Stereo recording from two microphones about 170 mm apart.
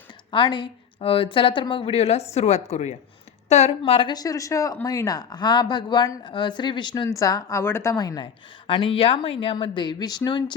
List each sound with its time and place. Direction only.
0.3 s speech: 30° left (ahead or behind)